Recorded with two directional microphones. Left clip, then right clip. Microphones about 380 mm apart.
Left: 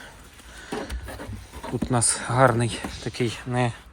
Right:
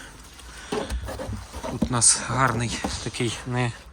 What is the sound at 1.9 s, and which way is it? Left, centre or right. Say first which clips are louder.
Speech: even; centre.